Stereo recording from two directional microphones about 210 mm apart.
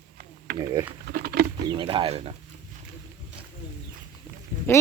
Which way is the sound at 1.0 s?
45° right (ahead or behind).